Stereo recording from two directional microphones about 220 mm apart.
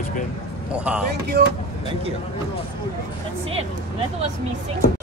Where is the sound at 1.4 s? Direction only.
50° right (ahead or behind).